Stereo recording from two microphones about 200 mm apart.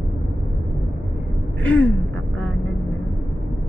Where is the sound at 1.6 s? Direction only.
5° left (ahead or behind).